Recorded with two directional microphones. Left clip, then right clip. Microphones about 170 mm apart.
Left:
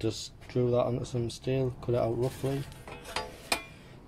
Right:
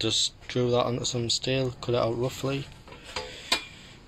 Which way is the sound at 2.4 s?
25° right (ahead or behind).